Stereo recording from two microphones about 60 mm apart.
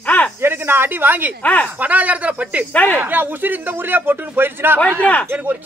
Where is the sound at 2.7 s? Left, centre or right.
Left.